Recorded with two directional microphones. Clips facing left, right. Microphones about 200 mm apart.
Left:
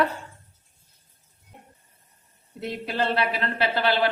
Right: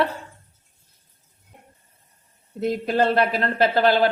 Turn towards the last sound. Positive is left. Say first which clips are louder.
# right 5 dB
turn(degrees=-45)  # may be behind; listen again after turning